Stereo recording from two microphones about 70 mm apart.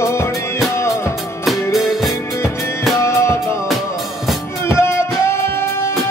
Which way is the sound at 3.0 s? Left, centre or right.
Left.